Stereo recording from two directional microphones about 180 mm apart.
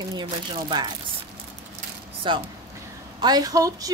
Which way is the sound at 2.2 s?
25° right (ahead or behind).